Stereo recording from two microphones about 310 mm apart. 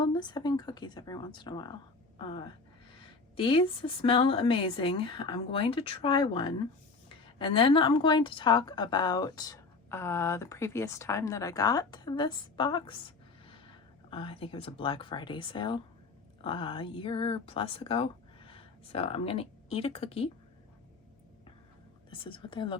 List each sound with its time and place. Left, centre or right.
0.0 s a woman's voice: centre
22.1 s a woman's voice: centre